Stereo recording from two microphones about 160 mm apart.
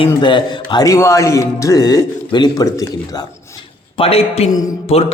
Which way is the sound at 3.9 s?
35° left (ahead or behind).